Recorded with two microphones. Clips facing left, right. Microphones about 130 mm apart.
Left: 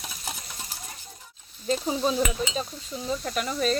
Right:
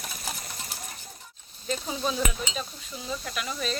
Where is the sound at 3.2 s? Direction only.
40° left (ahead or behind).